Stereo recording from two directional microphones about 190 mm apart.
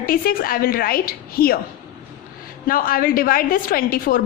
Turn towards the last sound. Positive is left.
turn(degrees=50)  # may be behind; listen again after turning